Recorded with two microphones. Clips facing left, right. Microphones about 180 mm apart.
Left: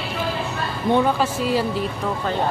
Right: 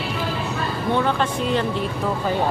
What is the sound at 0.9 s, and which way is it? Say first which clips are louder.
Speech: left 3 dB; 10° left (ahead or behind).